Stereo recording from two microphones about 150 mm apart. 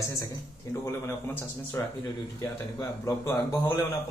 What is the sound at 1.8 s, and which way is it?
Speech, 15° left (ahead or behind).